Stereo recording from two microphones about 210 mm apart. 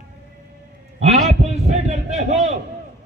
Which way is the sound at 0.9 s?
30° right (ahead or behind).